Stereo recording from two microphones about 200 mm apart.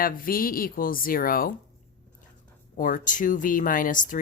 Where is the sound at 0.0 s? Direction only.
45° left (ahead or behind).